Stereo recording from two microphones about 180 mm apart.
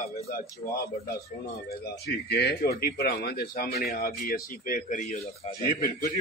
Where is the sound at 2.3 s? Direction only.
65° left (ahead or behind).